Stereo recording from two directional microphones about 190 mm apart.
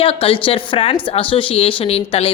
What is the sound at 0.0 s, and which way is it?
A woman's voice, 30° left (ahead or behind).